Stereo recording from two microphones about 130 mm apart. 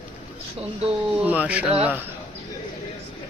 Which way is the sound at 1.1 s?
10° right (ahead or behind).